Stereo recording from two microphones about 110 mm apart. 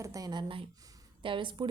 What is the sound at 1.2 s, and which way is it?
Speech, 50° right (ahead or behind).